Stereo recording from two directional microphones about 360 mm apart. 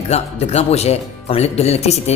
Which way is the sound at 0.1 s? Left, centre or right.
Centre.